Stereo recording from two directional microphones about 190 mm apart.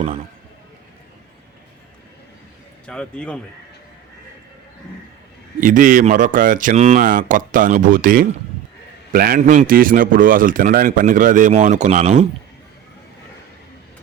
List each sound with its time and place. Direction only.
2.8 s speech: 5° left (ahead or behind)
5.5 s a man's voice: 45° right (ahead or behind)